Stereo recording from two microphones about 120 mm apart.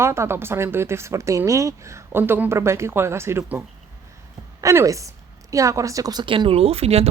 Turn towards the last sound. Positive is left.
turn(degrees=-60)  # may be behind; listen again after turning